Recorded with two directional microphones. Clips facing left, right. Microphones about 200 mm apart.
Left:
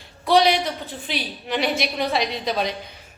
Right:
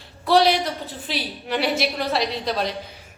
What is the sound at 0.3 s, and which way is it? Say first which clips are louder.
A woman's voice: even; centre (ahead or behind).